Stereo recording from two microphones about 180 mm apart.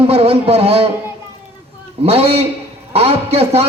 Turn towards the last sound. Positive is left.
turn(degrees=-35)  # may be behind; listen again after turning